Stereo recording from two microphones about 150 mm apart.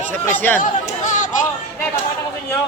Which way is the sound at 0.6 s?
55° left (ahead or behind).